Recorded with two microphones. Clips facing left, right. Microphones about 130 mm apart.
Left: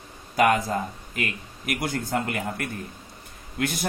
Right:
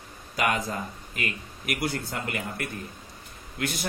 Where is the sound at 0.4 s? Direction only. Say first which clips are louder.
Left 6 dB; 45° left (ahead or behind).